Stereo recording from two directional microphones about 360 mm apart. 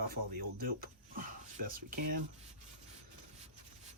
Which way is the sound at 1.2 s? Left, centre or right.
Right.